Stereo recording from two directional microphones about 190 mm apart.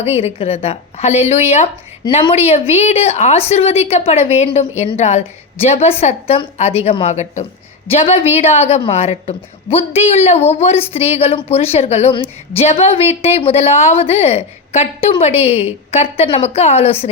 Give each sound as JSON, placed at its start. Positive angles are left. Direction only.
{"t": 0.0, "sound": "a woman's voice", "side_deg": 35}